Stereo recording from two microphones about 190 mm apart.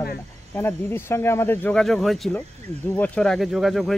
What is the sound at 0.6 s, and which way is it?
Speech, 10° left (ahead or behind).